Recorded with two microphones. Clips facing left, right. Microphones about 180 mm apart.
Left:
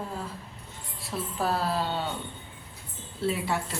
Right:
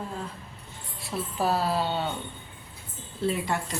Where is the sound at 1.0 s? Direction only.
Centre (ahead or behind).